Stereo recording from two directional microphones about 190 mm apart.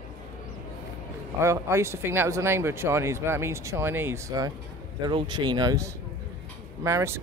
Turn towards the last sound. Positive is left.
turn(degrees=-15)  # may be behind; listen again after turning